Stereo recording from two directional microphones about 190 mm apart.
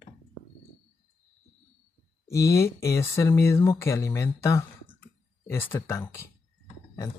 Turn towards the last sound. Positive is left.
turn(degrees=15)  # may be behind; listen again after turning